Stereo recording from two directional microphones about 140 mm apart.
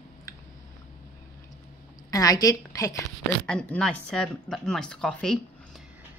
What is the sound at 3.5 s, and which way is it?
Speech, 5° left (ahead or behind).